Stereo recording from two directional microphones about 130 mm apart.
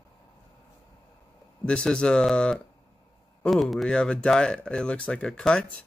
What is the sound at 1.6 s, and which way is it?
Speech, 5° left (ahead or behind).